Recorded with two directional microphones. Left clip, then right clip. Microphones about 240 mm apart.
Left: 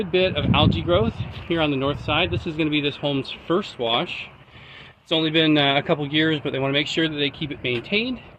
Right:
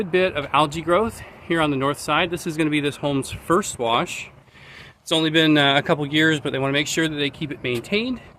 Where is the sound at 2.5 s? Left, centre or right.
Right.